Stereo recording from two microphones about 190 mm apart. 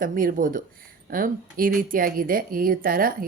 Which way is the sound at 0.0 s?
45° right (ahead or behind).